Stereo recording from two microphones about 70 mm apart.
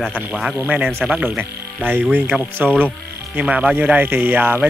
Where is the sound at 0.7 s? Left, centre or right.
Centre.